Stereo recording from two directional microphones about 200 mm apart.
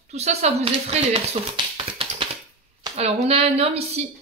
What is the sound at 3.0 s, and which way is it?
Speech, 30° right (ahead or behind).